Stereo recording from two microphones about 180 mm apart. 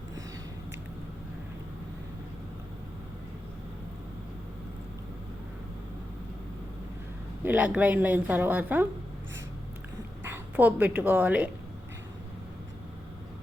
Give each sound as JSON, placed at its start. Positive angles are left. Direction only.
{"t": 7.4, "sound": "a woman's voice", "side_deg": -10}
{"t": 10.2, "sound": "a woman's voice", "side_deg": -10}